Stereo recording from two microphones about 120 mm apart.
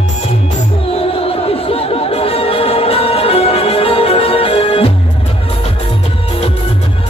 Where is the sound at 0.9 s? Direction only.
55° left (ahead or behind).